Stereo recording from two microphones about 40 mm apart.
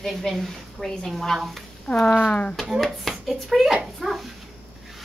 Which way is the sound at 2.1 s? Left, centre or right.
Left.